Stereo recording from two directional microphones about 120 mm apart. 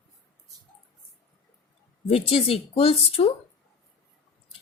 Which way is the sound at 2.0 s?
55° left (ahead or behind).